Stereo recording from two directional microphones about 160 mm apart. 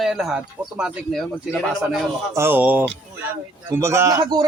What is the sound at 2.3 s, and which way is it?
A man's voice, 10° right (ahead or behind).